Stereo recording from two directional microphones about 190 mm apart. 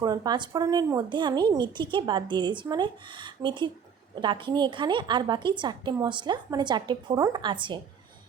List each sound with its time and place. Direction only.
0.0 s a woman's voice: 20° right (ahead or behind)